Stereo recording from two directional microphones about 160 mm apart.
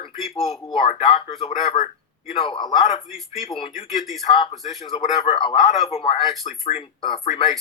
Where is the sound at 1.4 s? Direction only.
45° left (ahead or behind).